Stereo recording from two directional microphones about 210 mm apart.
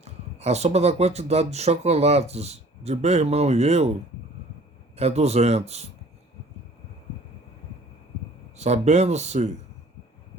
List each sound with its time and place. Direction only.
0.0 s speech: 30° right (ahead or behind)
4.9 s speech: 30° right (ahead or behind)
8.5 s speech: 30° right (ahead or behind)